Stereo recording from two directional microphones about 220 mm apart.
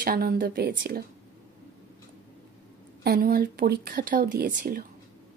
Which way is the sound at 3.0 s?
40° right (ahead or behind).